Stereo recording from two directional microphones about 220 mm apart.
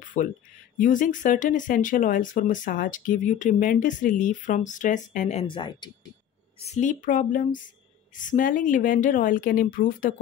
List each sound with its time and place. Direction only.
0.2 s speech: 35° left (ahead or behind)
6.6 s speech: 30° left (ahead or behind)